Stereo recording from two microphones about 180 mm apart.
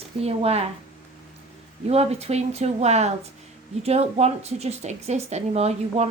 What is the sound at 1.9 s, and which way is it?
A woman's voice, 35° right (ahead or behind).